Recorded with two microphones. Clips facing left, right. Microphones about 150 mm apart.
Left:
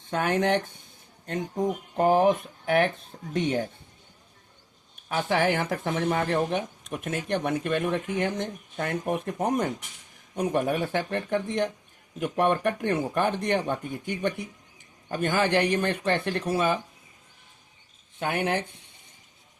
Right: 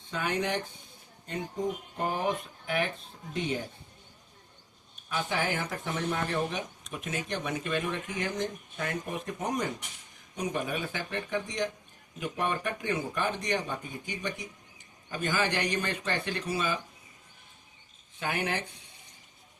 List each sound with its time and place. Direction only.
0.1 s speech: 50° left (ahead or behind)
5.0 s speech: 65° left (ahead or behind)
18.2 s speech: 55° left (ahead or behind)